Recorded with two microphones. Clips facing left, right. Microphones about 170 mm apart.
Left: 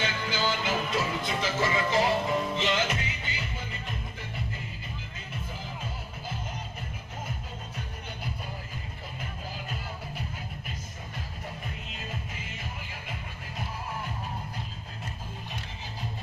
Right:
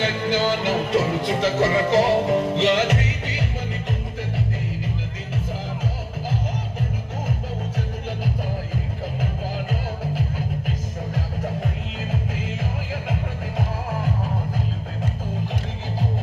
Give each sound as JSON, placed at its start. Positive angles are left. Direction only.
{"t": 0.0, "sound": "music", "side_deg": -65}
{"t": 9.2, "sound": "music", "side_deg": -90}